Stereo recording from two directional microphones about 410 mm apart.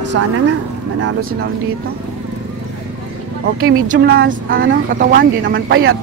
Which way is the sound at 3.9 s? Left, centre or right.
Right.